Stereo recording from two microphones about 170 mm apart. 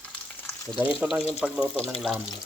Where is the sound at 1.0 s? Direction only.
5° right (ahead or behind).